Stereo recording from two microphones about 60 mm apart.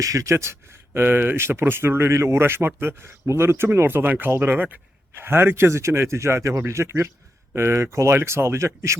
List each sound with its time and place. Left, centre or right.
0.0 s speech: right
1.0 s speech: right